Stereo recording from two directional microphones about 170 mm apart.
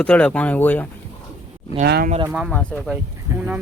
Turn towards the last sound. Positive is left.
turn(degrees=-10)  # may be behind; listen again after turning